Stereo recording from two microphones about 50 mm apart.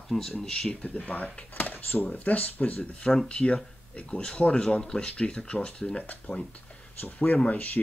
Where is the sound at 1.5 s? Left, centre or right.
Left.